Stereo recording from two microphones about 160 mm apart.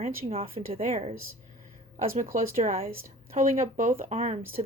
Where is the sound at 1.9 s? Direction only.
55° right (ahead or behind).